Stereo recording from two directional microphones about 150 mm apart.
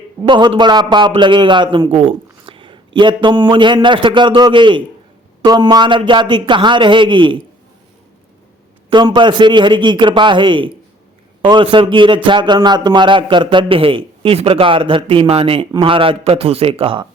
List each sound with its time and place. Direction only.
0.2 s a man's voice: 30° right (ahead or behind)
8.9 s a man's voice: 30° right (ahead or behind)